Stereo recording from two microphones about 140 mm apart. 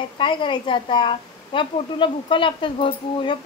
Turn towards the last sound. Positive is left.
turn(degrees=40)  # may be behind; listen again after turning